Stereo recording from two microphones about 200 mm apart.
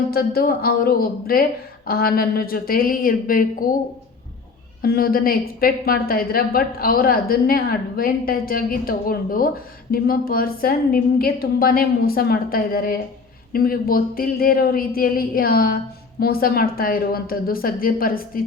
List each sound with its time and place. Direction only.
0.1 s a woman's voice: 50° left (ahead or behind)
4.8 s a woman's voice: 50° left (ahead or behind)